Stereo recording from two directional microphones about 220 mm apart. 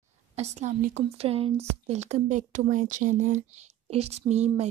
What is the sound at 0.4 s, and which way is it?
A woman's voice, 30° right (ahead or behind).